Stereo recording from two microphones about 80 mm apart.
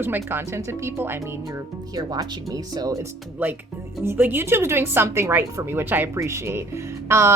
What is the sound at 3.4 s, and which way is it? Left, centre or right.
A woman's voice, right.